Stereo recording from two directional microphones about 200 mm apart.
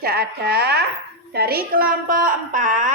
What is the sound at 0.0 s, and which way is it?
A woman's voice, 50° right (ahead or behind).